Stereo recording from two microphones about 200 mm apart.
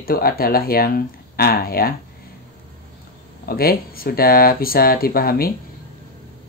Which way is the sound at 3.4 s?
50° left (ahead or behind).